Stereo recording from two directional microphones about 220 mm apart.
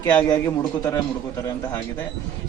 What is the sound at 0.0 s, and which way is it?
Speech, 10° left (ahead or behind).